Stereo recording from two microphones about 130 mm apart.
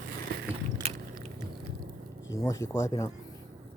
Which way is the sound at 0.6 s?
55° right (ahead or behind).